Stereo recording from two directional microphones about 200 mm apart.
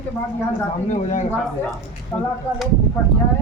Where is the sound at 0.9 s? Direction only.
35° left (ahead or behind).